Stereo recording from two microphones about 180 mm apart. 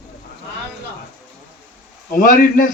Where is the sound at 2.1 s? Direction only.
50° left (ahead or behind).